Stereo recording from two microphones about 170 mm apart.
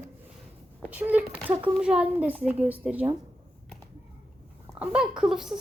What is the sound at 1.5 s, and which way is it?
Speech, 30° right (ahead or behind).